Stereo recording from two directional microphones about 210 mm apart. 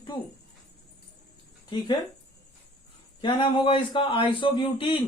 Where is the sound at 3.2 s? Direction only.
20° left (ahead or behind).